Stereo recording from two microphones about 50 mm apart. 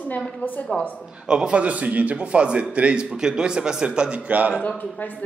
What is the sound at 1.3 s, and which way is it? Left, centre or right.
A man's voice, centre.